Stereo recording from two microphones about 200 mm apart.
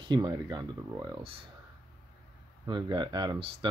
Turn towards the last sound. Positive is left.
turn(degrees=-20)  # may be behind; listen again after turning